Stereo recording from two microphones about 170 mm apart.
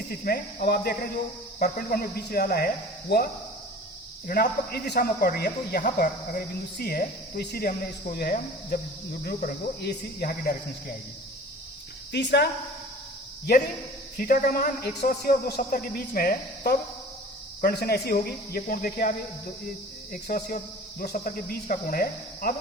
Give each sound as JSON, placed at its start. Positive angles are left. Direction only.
{"t": 0.1, "sound": "speech", "side_deg": 60}
{"t": 4.3, "sound": "speech", "side_deg": 60}
{"t": 9.2, "sound": "speech", "side_deg": 50}
{"t": 9.8, "sound": "speech", "side_deg": 70}
{"t": 12.1, "sound": "speech", "side_deg": 85}
{"t": 14.2, "sound": "speech", "side_deg": 55}
{"t": 20.2, "sound": "speech", "side_deg": 60}